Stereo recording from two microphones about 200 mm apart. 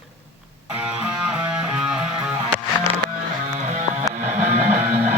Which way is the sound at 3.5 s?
35° right (ahead or behind).